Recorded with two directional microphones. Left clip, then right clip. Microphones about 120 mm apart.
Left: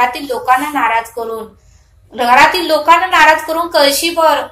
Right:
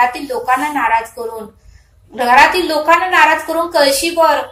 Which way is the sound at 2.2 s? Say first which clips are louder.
Left 1 dB; 20° left (ahead or behind).